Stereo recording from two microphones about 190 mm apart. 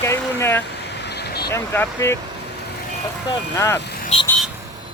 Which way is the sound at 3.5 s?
10° left (ahead or behind).